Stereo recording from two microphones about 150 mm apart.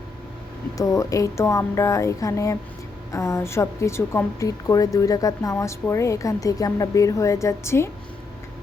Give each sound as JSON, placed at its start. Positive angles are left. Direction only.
{"t": 0.8, "sound": "a woman's voice", "side_deg": 20}